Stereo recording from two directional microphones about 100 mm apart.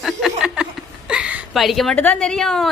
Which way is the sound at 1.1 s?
10° right (ahead or behind).